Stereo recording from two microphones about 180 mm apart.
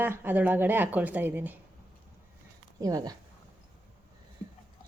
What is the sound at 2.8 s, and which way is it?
Speech, 20° right (ahead or behind).